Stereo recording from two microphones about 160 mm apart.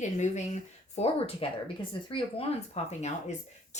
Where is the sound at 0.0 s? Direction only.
50° left (ahead or behind).